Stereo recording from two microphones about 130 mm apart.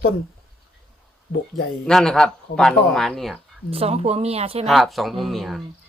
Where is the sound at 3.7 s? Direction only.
50° right (ahead or behind).